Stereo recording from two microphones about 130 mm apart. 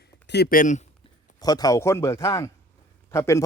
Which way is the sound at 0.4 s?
90° left.